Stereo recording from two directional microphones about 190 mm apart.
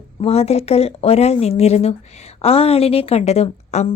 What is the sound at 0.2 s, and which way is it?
Speech, 30° left (ahead or behind).